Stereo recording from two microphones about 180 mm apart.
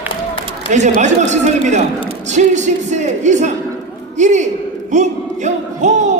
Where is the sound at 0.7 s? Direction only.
40° right (ahead or behind).